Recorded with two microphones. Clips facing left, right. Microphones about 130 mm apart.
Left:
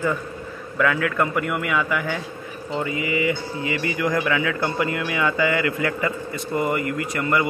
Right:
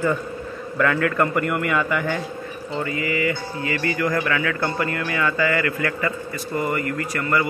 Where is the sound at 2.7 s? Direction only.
15° left (ahead or behind).